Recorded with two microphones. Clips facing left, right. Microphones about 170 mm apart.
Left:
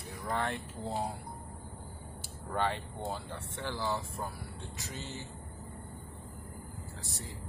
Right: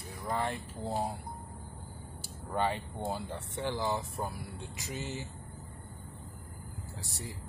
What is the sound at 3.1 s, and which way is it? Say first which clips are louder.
Speech: right 3 dB; 20° right (ahead or behind).